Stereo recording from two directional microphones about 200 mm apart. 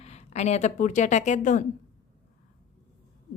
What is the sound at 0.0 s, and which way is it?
Speech, 35° left (ahead or behind).